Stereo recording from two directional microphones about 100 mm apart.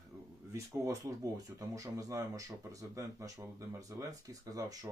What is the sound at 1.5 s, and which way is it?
Speech, 35° right (ahead or behind).